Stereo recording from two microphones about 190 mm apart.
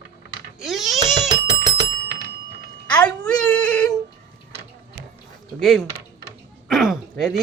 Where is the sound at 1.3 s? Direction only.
20° right (ahead or behind).